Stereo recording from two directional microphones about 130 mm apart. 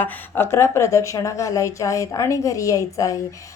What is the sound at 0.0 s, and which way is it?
A woman's voice, 15° left (ahead or behind).